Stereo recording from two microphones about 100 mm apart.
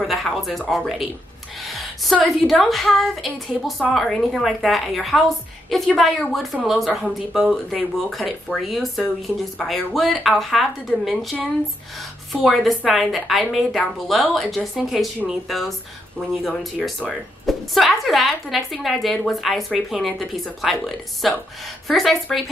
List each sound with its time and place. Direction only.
0.0 s speech: centre (ahead or behind)
1.7 s a sound: centre (ahead or behind)
2.6 s a woman's voice: centre (ahead or behind)